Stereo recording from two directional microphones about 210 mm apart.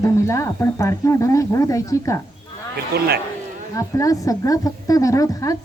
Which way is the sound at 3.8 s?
15° left (ahead or behind).